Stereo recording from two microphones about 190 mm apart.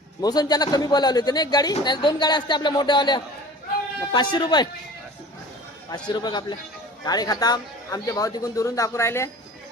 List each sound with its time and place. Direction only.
0.2 s a man's voice: 20° left (ahead or behind)
5.9 s a man's voice: 20° left (ahead or behind)